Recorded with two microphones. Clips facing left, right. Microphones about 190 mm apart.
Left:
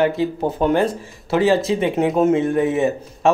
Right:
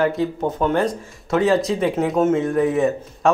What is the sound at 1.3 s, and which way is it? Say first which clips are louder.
Speech: left 1 dB; 5° left (ahead or behind).